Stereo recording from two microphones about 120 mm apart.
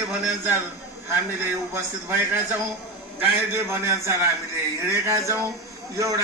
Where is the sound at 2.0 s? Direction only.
20° right (ahead or behind).